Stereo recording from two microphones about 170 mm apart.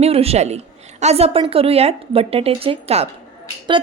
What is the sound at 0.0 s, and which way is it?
A woman's voice, 35° right (ahead or behind).